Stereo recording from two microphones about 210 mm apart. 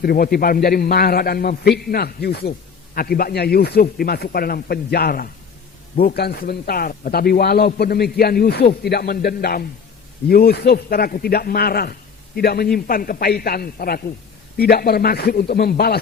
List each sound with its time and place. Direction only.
0.0 s a man's voice: 45° left (ahead or behind)